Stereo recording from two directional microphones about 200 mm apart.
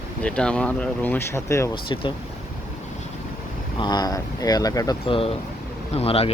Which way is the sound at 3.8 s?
20° left (ahead or behind).